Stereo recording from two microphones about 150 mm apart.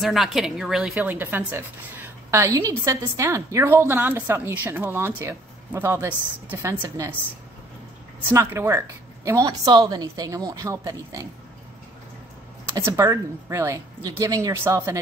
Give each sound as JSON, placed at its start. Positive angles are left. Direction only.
{"t": 0.0, "sound": "speech", "side_deg": 0}
{"t": 0.9, "sound": "a woman's voice", "side_deg": -15}
{"t": 8.3, "sound": "a woman's voice", "side_deg": -15}
{"t": 12.7, "sound": "a woman's voice", "side_deg": -20}